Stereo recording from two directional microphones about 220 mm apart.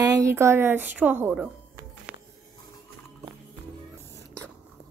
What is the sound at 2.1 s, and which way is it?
Music, 5° right (ahead or behind).